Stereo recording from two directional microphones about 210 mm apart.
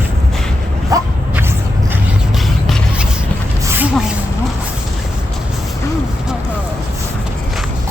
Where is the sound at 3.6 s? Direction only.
10° right (ahead or behind).